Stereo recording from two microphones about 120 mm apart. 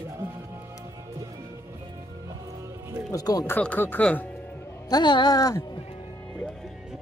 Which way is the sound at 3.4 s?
15° left (ahead or behind).